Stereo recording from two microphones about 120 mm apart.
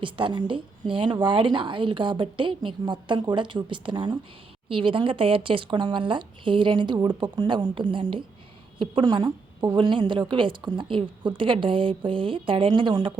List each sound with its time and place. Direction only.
0.0 s speech: 45° right (ahead or behind)